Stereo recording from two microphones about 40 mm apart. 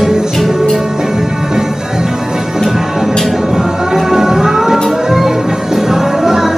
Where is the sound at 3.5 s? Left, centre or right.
Centre.